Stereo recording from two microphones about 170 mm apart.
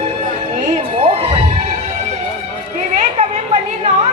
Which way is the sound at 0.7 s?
35° right (ahead or behind).